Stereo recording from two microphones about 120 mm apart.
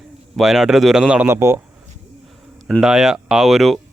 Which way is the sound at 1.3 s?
25° right (ahead or behind).